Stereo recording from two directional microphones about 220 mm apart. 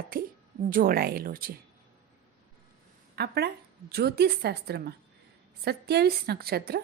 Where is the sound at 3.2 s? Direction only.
45° right (ahead or behind).